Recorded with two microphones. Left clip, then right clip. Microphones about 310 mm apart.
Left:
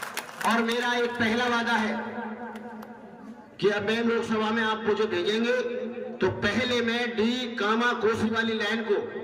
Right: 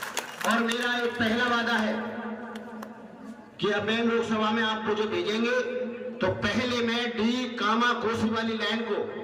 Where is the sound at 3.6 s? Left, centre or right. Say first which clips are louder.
Left 1 dB; centre.